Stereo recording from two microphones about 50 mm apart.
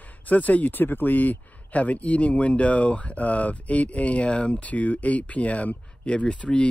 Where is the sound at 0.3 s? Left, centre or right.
Left.